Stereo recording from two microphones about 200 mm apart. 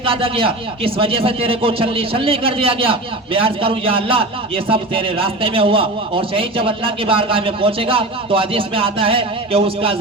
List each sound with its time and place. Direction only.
0.0 s speech: 25° right (ahead or behind)